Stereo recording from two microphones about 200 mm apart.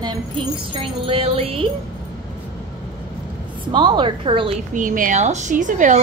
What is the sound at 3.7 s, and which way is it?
Speech, 25° right (ahead or behind).